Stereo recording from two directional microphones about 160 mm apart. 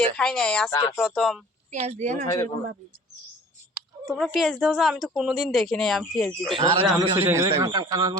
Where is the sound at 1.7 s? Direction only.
45° right (ahead or behind).